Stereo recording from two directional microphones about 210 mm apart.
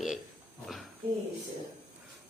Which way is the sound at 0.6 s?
Centre (ahead or behind).